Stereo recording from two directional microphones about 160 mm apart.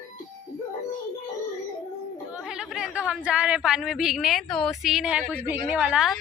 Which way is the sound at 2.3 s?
5° right (ahead or behind).